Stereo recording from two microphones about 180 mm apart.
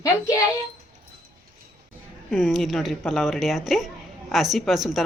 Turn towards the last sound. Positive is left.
turn(degrees=0)  # may be behind; listen again after turning